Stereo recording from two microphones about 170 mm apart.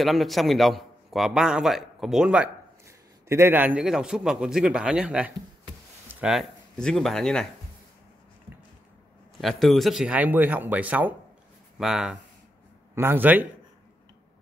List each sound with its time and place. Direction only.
0.0 s a man's voice: centre (ahead or behind)
9.4 s a man's voice: centre (ahead or behind)
12.9 s speech: 10° right (ahead or behind)